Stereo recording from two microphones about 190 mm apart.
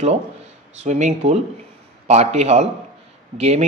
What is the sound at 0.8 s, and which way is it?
Speech, 40° right (ahead or behind).